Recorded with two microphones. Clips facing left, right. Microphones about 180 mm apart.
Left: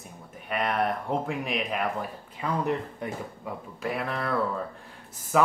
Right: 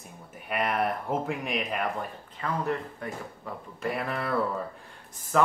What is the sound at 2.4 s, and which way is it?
Speech, 20° left (ahead or behind).